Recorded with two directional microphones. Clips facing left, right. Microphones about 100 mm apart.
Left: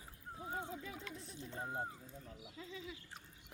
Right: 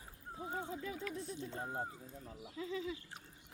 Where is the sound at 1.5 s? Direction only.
5° right (ahead or behind).